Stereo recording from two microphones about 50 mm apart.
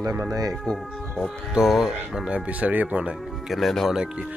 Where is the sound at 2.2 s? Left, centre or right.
Right.